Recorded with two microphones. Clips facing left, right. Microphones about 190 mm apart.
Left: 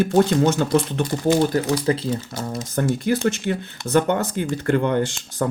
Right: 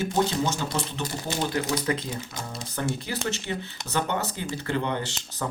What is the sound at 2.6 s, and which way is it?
Speech, 50° left (ahead or behind).